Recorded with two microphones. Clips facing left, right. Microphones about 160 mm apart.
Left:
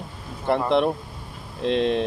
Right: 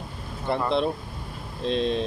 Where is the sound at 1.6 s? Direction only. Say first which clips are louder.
Left 3 dB; 75° left (ahead or behind).